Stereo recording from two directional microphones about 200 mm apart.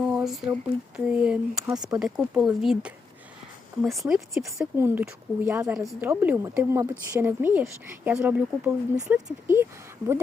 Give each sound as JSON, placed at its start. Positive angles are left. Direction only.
{"t": 0.0, "sound": "speech", "side_deg": -5}
{"t": 1.7, "sound": "speech", "side_deg": -20}
{"t": 2.0, "sound": "speech", "side_deg": -5}
{"t": 4.1, "sound": "a woman's voice", "side_deg": -10}